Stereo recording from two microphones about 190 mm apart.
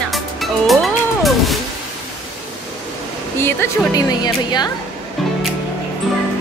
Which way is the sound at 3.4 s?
10° left (ahead or behind).